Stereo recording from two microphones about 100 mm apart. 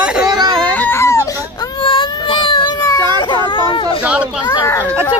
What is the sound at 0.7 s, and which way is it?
Speech, 20° left (ahead or behind).